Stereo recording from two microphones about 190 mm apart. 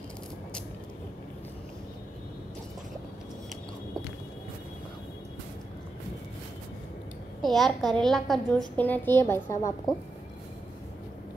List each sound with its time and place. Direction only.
7.4 s a woman's voice: centre (ahead or behind)